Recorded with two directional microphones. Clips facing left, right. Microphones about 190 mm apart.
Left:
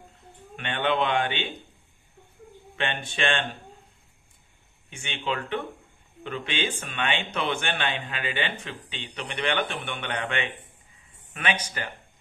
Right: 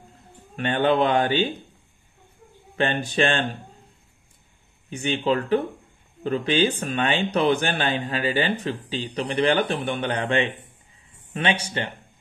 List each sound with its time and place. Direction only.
0.6 s a man's voice: 40° right (ahead or behind)
2.7 s a man's voice: 40° right (ahead or behind)
4.8 s a man's voice: 35° right (ahead or behind)